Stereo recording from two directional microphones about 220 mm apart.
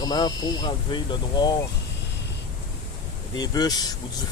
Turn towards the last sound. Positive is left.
turn(degrees=15)  # may be behind; listen again after turning